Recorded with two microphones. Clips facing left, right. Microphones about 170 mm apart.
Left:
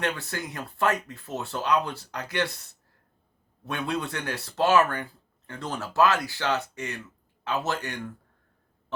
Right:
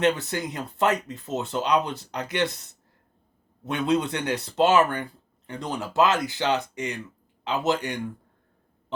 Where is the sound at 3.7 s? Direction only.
20° right (ahead or behind).